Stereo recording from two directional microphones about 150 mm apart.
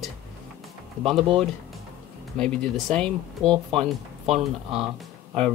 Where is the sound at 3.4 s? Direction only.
30° right (ahead or behind).